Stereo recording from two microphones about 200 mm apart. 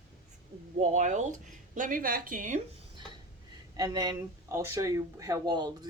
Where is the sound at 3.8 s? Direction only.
20° right (ahead or behind).